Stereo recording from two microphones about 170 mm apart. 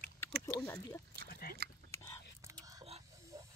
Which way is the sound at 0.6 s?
15° left (ahead or behind).